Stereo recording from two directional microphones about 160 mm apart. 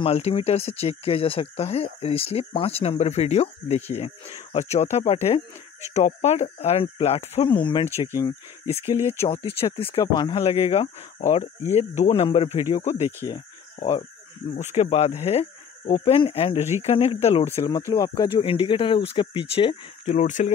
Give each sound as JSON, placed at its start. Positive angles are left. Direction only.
{"t": 0.0, "sound": "speech", "side_deg": 40}
{"t": 8.8, "sound": "speech", "side_deg": -15}
{"t": 9.2, "sound": "speech", "side_deg": 35}
{"t": 12.8, "sound": "insect", "side_deg": 45}
{"t": 14.5, "sound": "insect", "side_deg": 45}
{"t": 16.2, "sound": "speech", "side_deg": 35}
{"t": 16.5, "sound": "speech", "side_deg": -15}
{"t": 16.8, "sound": "speech", "side_deg": 40}
{"t": 17.6, "sound": "speech", "side_deg": 25}
{"t": 20.2, "sound": "insect", "side_deg": 50}